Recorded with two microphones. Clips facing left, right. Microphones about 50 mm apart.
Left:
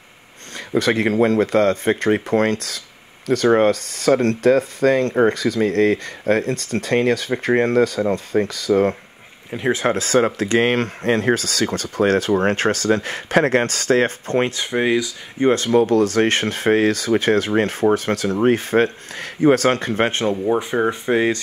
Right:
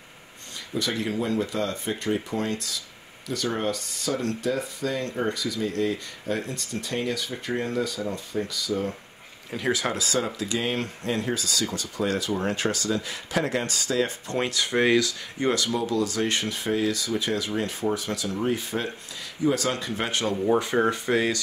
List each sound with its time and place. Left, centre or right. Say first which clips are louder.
0.7 s speech: left 11 dB; left
9.5 s speech: left 7 dB; left
14.8 s speech: left 2 dB; centre; by 20.3 s left
20.5 s speech: left 3 dB; centre
20.9 s speech: left 6 dB; left